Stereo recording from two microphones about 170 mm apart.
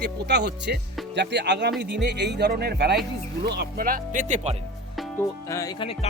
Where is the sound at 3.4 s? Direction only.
75° right (ahead or behind); by 4.5 s 45° right (ahead or behind).